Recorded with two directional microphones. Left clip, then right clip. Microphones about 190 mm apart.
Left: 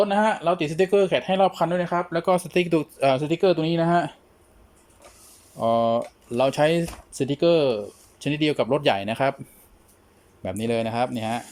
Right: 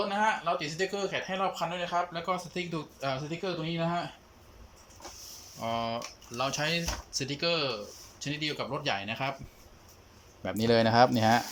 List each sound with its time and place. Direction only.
0.1 s speech: 50° left (ahead or behind)
5.5 s speech: 40° left (ahead or behind)
10.4 s speech: 15° left (ahead or behind)